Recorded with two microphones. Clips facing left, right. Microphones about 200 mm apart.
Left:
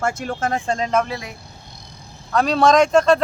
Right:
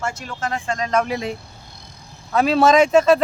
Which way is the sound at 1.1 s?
20° right (ahead or behind).